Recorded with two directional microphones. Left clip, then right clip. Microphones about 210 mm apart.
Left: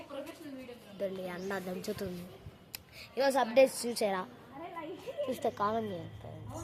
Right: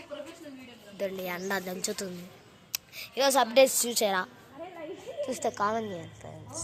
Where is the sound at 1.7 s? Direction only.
5° right (ahead or behind).